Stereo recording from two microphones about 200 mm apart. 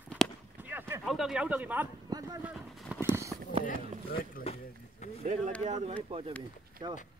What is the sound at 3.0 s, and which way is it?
Clip-clop, 15° right (ahead or behind).